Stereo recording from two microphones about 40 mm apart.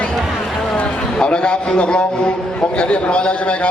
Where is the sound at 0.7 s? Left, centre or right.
Left.